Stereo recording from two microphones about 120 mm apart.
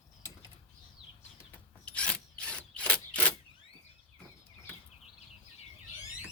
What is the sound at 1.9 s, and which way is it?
Wood, 10° left (ahead or behind).